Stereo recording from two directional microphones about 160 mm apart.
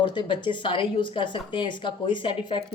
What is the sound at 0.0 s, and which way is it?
A woman's voice, 30° left (ahead or behind).